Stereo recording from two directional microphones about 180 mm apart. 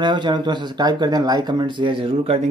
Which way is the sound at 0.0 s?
25° right (ahead or behind).